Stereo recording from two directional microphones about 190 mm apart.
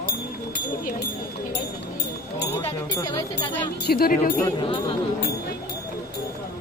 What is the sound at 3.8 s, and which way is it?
Speech, 55° left (ahead or behind).